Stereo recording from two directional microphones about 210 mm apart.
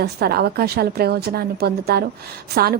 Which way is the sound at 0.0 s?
50° right (ahead or behind).